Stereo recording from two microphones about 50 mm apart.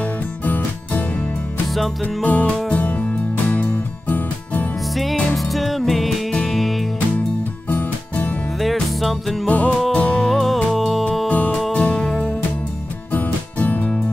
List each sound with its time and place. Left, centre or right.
2.2 s music: left
5.3 s music: centre
8.5 s music: centre
9.5 s music: left
10.2 s music: centre
11.2 s music: left
13.1 s music: left